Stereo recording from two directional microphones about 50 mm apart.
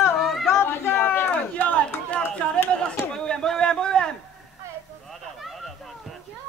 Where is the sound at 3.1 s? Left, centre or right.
Centre.